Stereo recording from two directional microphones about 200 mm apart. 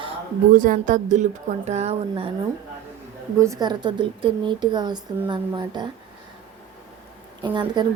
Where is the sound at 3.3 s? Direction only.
15° right (ahead or behind).